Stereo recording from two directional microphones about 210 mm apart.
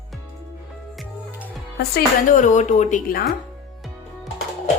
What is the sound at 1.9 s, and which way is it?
A woman's voice, 40° left (ahead or behind).